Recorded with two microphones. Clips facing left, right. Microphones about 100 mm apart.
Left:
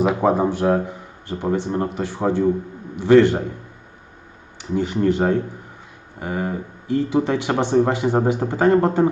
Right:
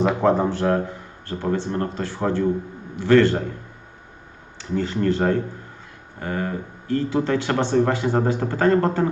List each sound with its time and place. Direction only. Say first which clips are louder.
0.0 s speech: left 1 dB; 10° left (ahead or behind)
4.5 s speech: left 2 dB; 15° left (ahead or behind)